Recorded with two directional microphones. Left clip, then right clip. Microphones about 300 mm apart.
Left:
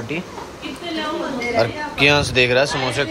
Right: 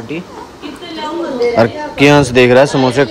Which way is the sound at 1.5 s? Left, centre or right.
Right.